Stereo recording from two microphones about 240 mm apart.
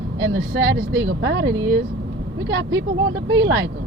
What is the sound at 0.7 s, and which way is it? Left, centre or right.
Speech, right.